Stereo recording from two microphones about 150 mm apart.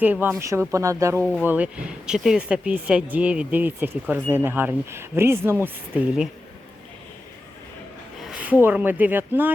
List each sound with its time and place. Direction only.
0.0 s speech: 10° right (ahead or behind)
1.2 s speech: 10° left (ahead or behind)
1.5 s speech: 10° right (ahead or behind)
8.3 s a sound: 10° right (ahead or behind)
8.6 s speech: 10° right (ahead or behind)